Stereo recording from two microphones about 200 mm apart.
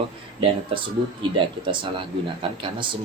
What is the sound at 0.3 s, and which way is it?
Speech, 25° right (ahead or behind).